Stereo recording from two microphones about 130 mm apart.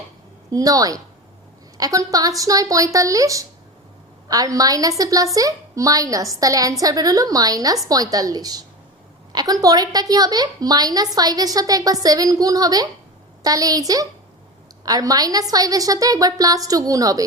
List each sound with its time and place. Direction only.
0.5 s a woman's voice: 25° right (ahead or behind)